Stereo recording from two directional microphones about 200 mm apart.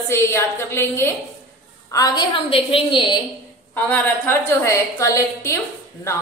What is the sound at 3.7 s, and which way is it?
A woman's voice, 10° left (ahead or behind).